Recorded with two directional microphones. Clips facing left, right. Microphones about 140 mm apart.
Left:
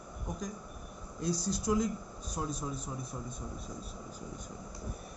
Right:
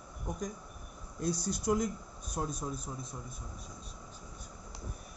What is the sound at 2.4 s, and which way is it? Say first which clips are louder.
Speech: right 1 dB; 5° left (ahead or behind).